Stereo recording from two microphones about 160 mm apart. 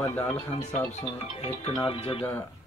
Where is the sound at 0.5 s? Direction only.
45° left (ahead or behind).